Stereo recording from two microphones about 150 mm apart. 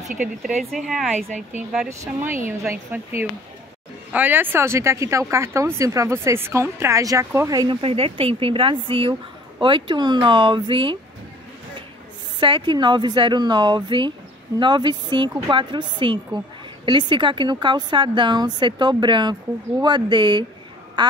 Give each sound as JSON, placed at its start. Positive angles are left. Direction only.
{"t": 0.2, "sound": "a woman's voice", "side_deg": 0}
{"t": 1.1, "sound": "speech", "side_deg": -55}
{"t": 2.7, "sound": "speech", "side_deg": -15}
{"t": 7.8, "sound": "a woman's voice", "side_deg": -40}
{"t": 12.4, "sound": "a woman's voice", "side_deg": -30}